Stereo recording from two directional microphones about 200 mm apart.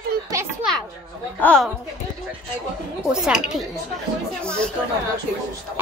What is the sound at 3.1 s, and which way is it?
Speech, 5° right (ahead or behind).